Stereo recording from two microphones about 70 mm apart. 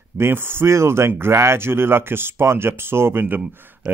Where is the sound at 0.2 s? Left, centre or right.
Right.